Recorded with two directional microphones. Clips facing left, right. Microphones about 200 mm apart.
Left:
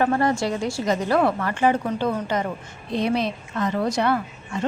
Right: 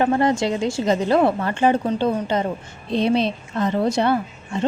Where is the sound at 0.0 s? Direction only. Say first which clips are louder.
Right 2 dB; 20° right (ahead or behind).